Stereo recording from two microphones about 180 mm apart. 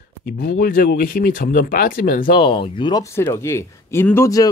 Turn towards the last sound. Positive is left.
turn(degrees=15)  # may be behind; listen again after turning